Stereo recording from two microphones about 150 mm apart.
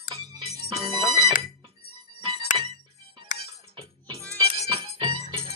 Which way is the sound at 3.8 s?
35° right (ahead or behind).